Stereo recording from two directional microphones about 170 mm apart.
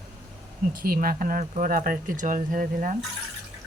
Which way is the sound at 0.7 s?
55° right (ahead or behind).